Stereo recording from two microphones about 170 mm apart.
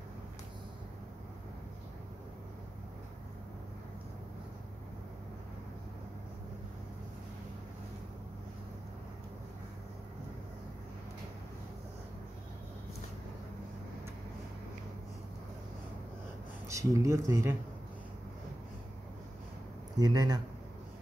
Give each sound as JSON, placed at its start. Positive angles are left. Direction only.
{"t": 16.6, "sound": "speech", "side_deg": -20}
{"t": 20.0, "sound": "speech", "side_deg": -25}